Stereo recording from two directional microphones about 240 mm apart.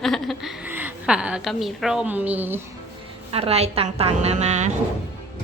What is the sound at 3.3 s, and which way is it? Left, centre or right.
A woman's voice, right.